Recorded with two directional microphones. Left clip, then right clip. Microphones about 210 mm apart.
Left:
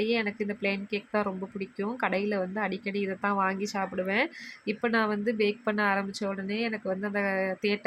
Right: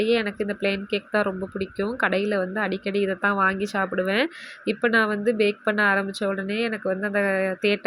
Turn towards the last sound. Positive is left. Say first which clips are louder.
# right 6 dB
turn(degrees=-10)  # may be behind; listen again after turning